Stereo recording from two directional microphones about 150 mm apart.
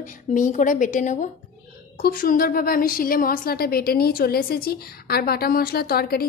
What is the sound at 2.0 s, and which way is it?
A woman's voice, 75° left (ahead or behind).